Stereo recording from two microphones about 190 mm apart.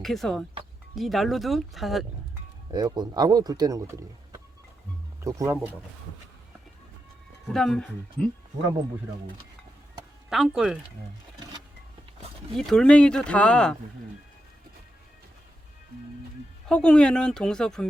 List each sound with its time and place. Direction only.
0.0 s speech: centre (ahead or behind)
2.7 s speech: 20° right (ahead or behind)
7.4 s speech: centre (ahead or behind)
10.2 s speech: centre (ahead or behind)
12.5 s speech: 5° left (ahead or behind)
16.6 s speech: 5° left (ahead or behind)